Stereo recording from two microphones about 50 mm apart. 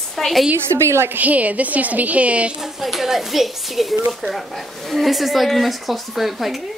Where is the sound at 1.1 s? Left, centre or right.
Right.